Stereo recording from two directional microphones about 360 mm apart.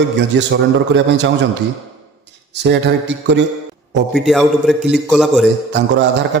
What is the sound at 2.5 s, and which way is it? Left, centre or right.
Speech, right.